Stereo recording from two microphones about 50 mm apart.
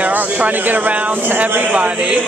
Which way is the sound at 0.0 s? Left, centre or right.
Right.